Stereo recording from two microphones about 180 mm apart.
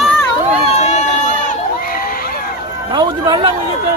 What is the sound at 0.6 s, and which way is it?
Run, 40° left (ahead or behind).